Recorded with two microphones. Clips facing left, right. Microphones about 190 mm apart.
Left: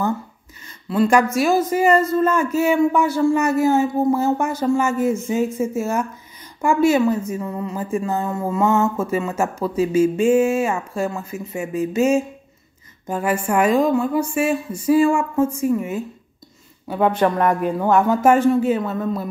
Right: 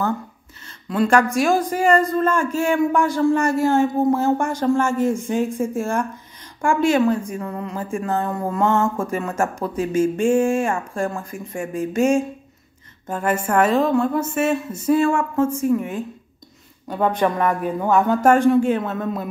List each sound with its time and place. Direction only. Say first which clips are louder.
0.8 s a woman's voice: left 1 dB; 5° left (ahead or behind)